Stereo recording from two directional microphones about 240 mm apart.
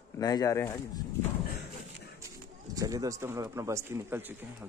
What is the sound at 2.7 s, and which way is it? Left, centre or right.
Speech, centre.